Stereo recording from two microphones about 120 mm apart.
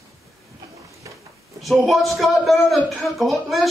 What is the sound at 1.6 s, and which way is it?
Speech, centre (ahead or behind).